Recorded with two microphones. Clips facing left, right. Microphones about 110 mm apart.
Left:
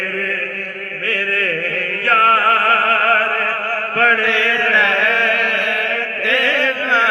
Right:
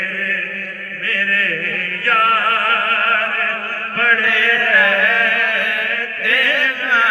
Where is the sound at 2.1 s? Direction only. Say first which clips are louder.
Left 2 dB; 30° left (ahead or behind).